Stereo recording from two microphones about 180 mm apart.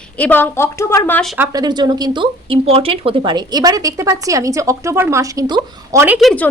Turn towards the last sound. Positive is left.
turn(degrees=5)  # may be behind; listen again after turning